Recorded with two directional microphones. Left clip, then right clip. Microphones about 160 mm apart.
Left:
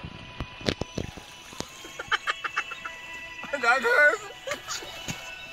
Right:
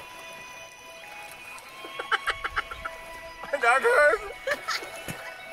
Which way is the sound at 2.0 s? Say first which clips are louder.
Even; 15° right (ahead or behind).